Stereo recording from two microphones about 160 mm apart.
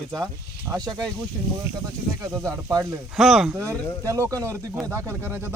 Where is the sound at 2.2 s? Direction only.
15° right (ahead or behind).